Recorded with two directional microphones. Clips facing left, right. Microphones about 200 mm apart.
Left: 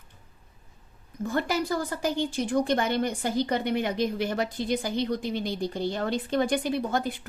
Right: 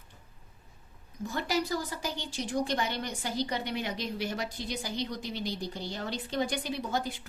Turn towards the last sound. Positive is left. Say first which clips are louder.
# left 5 dB
turn(degrees=55)  # may be behind; listen again after turning